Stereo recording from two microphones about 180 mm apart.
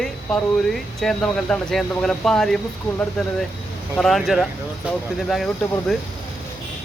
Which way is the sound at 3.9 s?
Centre (ahead or behind).